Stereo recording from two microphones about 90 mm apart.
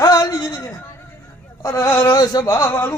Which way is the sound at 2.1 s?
45° left (ahead or behind).